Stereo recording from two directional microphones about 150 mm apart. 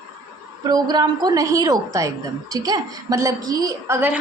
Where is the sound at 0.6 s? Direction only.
30° right (ahead or behind).